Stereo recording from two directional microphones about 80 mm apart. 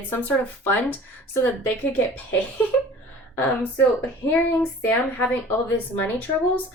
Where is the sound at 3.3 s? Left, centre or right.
Left.